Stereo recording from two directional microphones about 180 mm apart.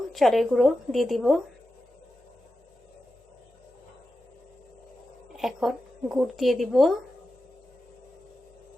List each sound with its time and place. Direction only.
0.1 s speech: centre (ahead or behind)
5.4 s speech: centre (ahead or behind)